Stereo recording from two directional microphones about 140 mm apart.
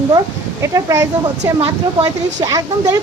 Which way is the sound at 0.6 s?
20° right (ahead or behind).